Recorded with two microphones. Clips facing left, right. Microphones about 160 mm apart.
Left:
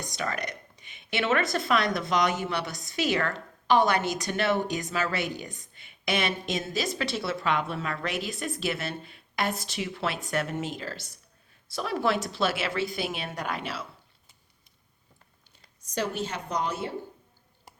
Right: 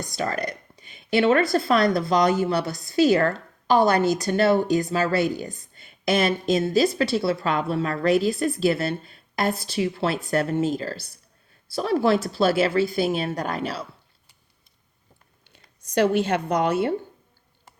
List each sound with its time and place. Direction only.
0.2 s speech: 35° right (ahead or behind)
15.4 s speech: 70° right (ahead or behind)